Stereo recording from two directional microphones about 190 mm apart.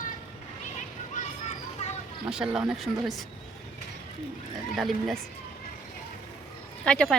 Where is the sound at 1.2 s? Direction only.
40° left (ahead or behind).